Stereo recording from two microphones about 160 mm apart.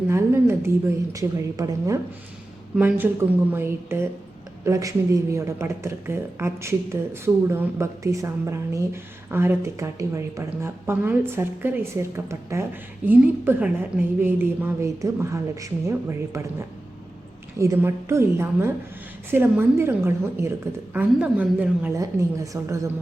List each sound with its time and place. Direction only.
0.1 s a woman's voice: 15° right (ahead or behind)
21.9 s a woman's voice: 20° right (ahead or behind)